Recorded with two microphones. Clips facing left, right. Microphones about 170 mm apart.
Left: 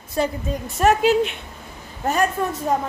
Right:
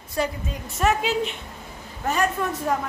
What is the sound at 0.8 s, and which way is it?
Speech, 50° left (ahead or behind).